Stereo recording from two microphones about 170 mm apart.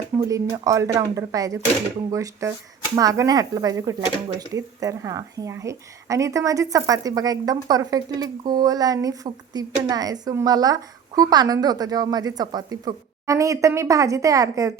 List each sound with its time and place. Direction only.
0.2 s speech: 20° right (ahead or behind)